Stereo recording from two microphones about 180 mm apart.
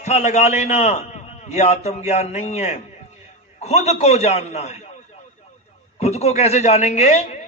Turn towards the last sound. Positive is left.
turn(degrees=40)  # may be behind; listen again after turning